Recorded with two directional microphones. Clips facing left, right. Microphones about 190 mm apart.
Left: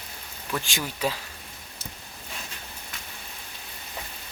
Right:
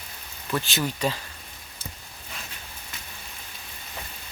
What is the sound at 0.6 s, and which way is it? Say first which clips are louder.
Speech: right 2 dB; 15° left (ahead or behind).